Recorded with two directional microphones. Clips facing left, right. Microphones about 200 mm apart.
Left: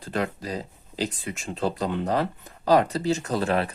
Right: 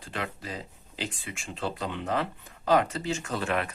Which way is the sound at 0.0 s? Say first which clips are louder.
Left 7 dB; 40° left (ahead or behind).